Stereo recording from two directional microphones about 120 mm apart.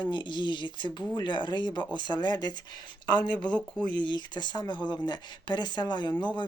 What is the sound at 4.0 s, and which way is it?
Speech, 40° left (ahead or behind).